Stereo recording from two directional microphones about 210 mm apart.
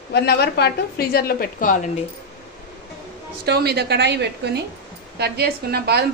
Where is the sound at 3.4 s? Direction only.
50° right (ahead or behind).